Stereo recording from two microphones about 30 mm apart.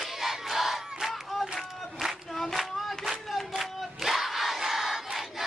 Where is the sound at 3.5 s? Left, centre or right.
Centre.